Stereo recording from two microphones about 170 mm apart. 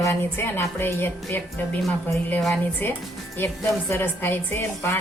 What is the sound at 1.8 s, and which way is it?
Speech, centre (ahead or behind).